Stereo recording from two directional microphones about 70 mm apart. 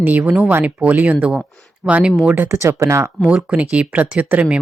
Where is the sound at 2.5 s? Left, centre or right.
Right.